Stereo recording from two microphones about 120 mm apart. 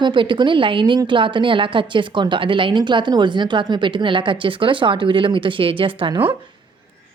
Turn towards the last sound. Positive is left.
turn(degrees=-45)  # may be behind; listen again after turning